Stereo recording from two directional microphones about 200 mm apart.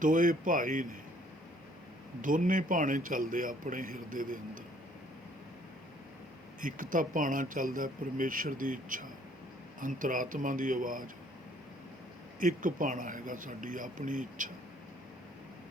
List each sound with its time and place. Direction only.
0.0 s speech: 40° right (ahead or behind)
2.2 s a man's voice: 40° right (ahead or behind)
6.6 s a man's voice: 40° right (ahead or behind)
12.4 s speech: 40° right (ahead or behind)